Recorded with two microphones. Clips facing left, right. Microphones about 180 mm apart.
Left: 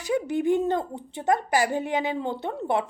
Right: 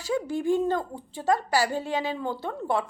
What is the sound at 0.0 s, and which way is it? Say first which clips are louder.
A woman's voice: left 2 dB; 20° left (ahead or behind).